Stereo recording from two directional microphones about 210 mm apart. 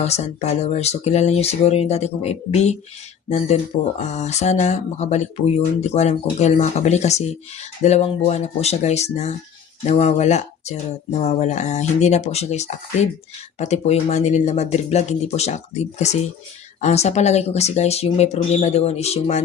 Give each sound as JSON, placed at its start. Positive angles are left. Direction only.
{"t": 0.0, "sound": "speech", "side_deg": 30}